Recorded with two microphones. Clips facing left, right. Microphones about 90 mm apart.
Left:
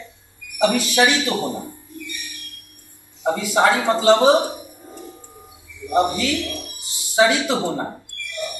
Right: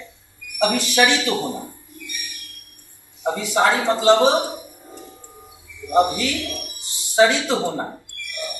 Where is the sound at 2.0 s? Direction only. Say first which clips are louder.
Right 3 dB; 15° right (ahead or behind).